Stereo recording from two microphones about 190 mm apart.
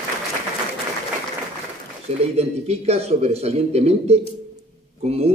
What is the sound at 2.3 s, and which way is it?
A man's voice, 35° right (ahead or behind).